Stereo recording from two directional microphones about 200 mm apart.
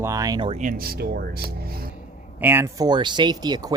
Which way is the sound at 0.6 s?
45° right (ahead or behind).